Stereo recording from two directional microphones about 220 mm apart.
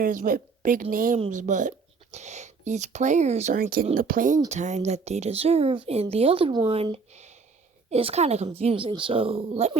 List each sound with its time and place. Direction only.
0.0 s speech: 40° right (ahead or behind)